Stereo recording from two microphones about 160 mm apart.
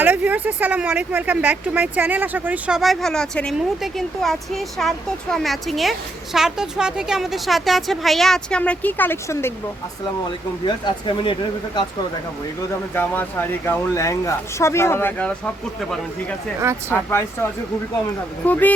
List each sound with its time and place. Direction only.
0.0 s speech: 10° right (ahead or behind); by 9.5 s 15° left (ahead or behind)
10.7 s speech: 30° left (ahead or behind)
12.9 s speech: 10° left (ahead or behind)
16.9 s speech: 15° left (ahead or behind)